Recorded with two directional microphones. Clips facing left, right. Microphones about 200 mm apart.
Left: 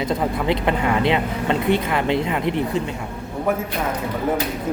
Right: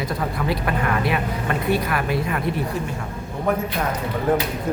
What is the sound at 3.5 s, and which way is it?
Speech, 5° left (ahead or behind).